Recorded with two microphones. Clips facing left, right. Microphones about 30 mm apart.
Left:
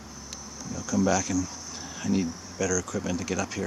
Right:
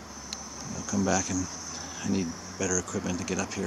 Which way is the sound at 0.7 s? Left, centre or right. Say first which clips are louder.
Left 3 dB; centre.